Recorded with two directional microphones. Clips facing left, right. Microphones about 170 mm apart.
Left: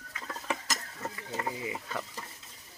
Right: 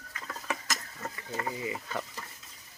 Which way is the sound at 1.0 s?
10° left (ahead or behind).